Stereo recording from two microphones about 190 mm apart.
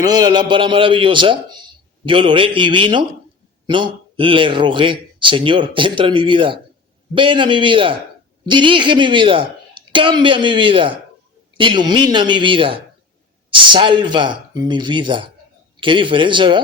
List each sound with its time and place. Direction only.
0.0 s a man's voice: 20° right (ahead or behind)